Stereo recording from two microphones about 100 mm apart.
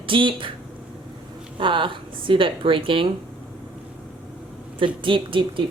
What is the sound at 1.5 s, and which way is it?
Speech, 55° right (ahead or behind).